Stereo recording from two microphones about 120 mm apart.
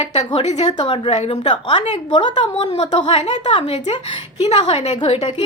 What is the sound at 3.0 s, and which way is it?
Speech, 45° left (ahead or behind).